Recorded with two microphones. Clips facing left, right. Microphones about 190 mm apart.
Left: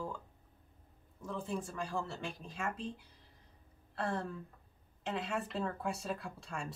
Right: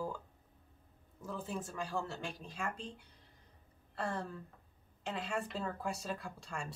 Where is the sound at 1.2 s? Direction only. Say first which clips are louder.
Left 2 dB; 5° right (ahead or behind).